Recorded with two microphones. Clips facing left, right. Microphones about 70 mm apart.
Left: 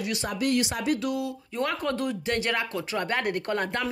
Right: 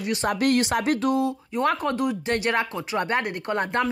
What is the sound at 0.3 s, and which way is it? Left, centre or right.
Speech, right.